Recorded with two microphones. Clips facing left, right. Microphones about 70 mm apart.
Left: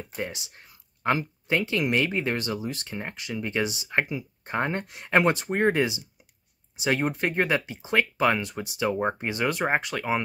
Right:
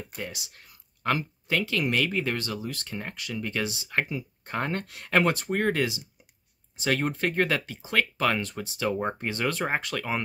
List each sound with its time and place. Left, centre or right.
0.1 s speech: left